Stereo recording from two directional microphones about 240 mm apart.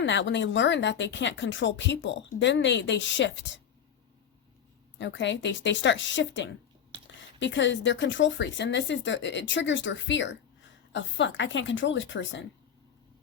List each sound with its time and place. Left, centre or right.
0.0 s speech: left
4.9 s speech: left